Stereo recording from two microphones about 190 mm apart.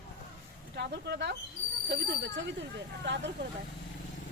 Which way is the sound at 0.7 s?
65° right (ahead or behind).